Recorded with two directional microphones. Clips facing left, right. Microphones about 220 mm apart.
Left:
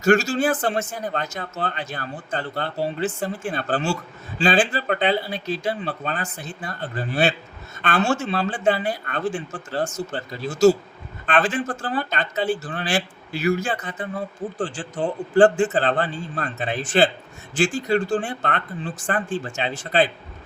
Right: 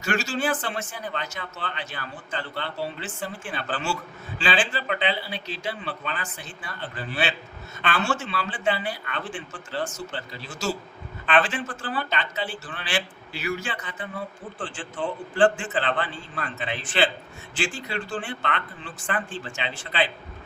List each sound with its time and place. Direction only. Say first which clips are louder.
0.0 s a man's voice: left 8 dB; 45° left (ahead or behind)